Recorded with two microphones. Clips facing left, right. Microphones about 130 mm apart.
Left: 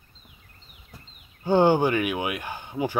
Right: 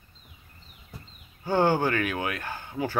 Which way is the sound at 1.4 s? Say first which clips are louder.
Left 4 dB; 20° left (ahead or behind).